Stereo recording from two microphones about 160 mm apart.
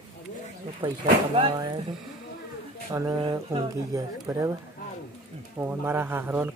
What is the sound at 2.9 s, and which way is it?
Speech, 20° right (ahead or behind).